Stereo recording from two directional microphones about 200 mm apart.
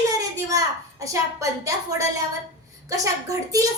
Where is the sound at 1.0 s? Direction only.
15° right (ahead or behind).